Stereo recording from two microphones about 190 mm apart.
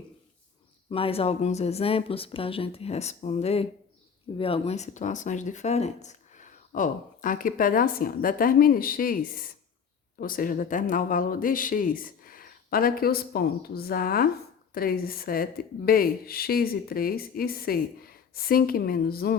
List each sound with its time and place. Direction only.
0.9 s speech: 30° left (ahead or behind); by 19.4 s 50° left (ahead or behind)